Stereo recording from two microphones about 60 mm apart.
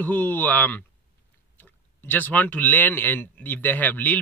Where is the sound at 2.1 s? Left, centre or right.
Left.